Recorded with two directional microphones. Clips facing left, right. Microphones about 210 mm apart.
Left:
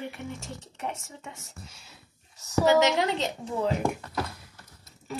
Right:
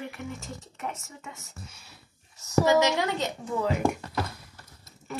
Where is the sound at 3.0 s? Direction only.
30° left (ahead or behind).